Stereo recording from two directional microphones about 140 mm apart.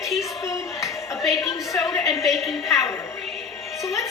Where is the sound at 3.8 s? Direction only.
20° left (ahead or behind).